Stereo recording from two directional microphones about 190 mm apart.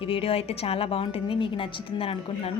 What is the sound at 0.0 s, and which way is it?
A woman's voice, 30° left (ahead or behind).